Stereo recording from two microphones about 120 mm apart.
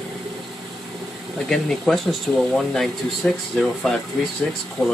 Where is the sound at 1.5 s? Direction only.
5° left (ahead or behind).